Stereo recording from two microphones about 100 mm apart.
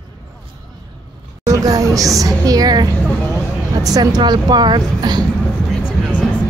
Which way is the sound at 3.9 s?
40° right (ahead or behind).